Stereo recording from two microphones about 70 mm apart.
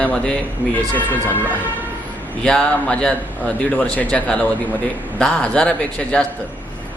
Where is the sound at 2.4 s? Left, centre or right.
Centre.